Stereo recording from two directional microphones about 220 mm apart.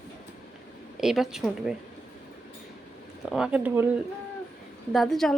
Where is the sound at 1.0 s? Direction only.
Centre (ahead or behind).